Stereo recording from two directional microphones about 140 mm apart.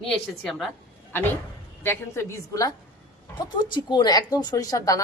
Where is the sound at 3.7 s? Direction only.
30° left (ahead or behind).